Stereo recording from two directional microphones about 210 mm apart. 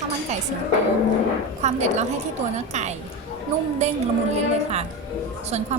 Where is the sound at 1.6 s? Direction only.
35° right (ahead or behind).